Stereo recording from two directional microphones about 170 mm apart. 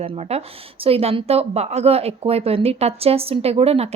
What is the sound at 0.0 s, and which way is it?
Speech, 35° right (ahead or behind).